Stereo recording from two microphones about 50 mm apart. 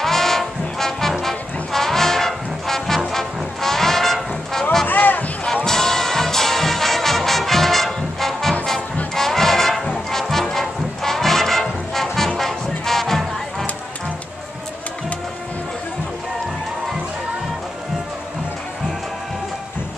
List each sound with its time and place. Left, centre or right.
0.0 s brass instrument: centre
3.1 s music: centre
4.8 s a sound: left
5.7 s music: centre